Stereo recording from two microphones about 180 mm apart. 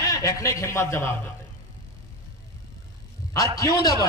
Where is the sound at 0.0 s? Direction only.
20° left (ahead or behind).